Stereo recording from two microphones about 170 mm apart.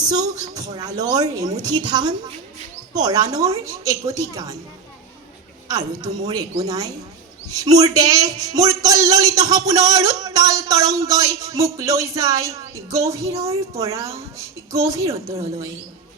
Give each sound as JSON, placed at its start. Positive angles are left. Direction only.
{"t": 0.0, "sound": "speech", "side_deg": -25}
{"t": 5.6, "sound": "speech", "side_deg": -20}